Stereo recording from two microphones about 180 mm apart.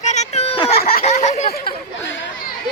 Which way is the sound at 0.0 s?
40° left (ahead or behind).